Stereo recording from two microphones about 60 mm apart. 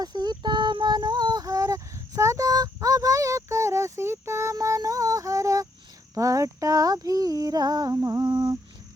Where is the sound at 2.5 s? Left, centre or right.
Right.